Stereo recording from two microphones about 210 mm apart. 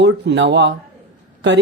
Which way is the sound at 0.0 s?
55° right (ahead or behind).